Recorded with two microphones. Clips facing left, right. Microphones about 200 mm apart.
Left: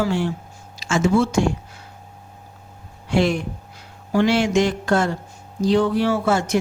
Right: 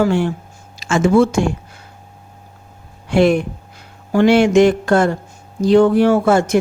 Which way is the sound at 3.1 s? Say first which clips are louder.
Right 6 dB; 55° right (ahead or behind).